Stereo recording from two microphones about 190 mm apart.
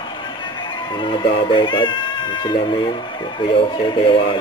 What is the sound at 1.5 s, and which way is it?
Speech, 25° left (ahead or behind).